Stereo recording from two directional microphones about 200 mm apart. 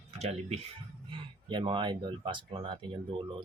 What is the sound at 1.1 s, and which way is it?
Speech, 25° right (ahead or behind).